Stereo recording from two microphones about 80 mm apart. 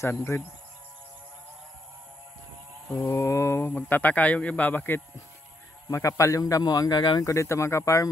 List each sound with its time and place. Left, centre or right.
0.0 s speech: left
3.2 s speech: left
3.7 s a man's voice: centre
5.9 s speech: left
7.2 s speech: left